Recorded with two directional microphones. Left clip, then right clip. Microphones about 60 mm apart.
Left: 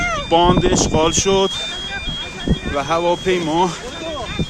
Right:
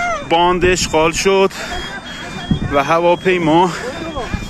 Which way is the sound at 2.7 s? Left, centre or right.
Right.